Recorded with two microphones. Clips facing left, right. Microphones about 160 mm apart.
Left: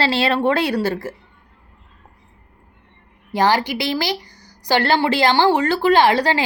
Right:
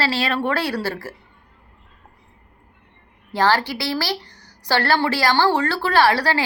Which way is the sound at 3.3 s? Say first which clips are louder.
Left 2 dB; 15° left (ahead or behind).